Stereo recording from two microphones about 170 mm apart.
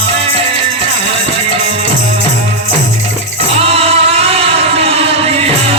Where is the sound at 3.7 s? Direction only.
35° right (ahead or behind).